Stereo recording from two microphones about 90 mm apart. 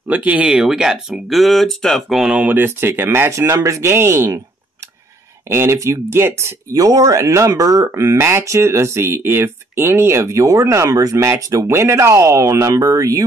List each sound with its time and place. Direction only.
0.1 s speech: 15° right (ahead or behind)
2.4 s speech: 25° right (ahead or behind)
5.5 s speech: 30° right (ahead or behind)
6.7 s speech: 40° right (ahead or behind)